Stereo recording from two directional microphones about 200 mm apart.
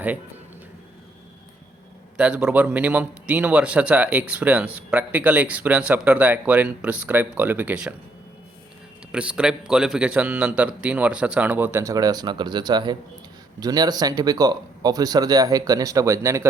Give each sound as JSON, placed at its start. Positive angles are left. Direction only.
{"t": 2.1, "sound": "a man's voice", "side_deg": -5}
{"t": 9.1, "sound": "a man's voice", "side_deg": -5}